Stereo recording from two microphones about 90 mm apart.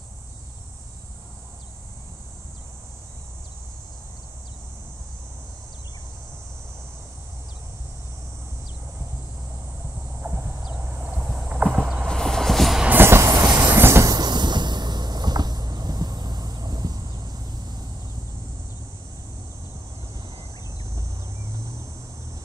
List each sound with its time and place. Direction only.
10.2 s a sound: 25° right (ahead or behind)
11.1 s vehicle: centre (ahead or behind)
11.5 s a sound: 10° right (ahead or behind)
12.0 s train: 5° left (ahead or behind)
12.8 s train: 25° right (ahead or behind); by 13.7 s 40° right (ahead or behind)
13.7 s train: 30° right (ahead or behind)
14.0 s vehicle: 50° right (ahead or behind)